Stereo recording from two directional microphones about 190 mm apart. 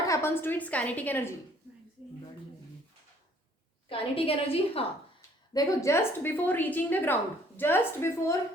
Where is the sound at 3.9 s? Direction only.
30° left (ahead or behind).